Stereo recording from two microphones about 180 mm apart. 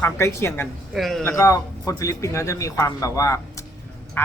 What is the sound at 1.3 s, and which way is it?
Speech, 20° left (ahead or behind).